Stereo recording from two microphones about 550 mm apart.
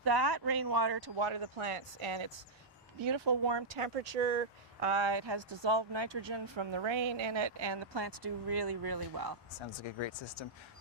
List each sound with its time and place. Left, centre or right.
0.0 s speech: right
3.0 s speech: right
3.8 s speech: right
9.6 s speech: left